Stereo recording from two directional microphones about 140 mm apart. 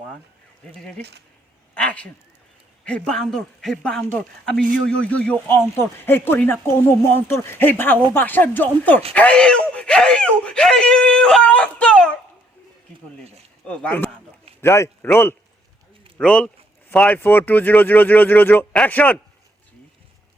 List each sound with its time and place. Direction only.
0.7 s speech: 5° left (ahead or behind)
1.7 s a sound: 10° left (ahead or behind)
2.8 s a man's voice: 5° left (ahead or behind)
13.7 s speech: 10° left (ahead or behind)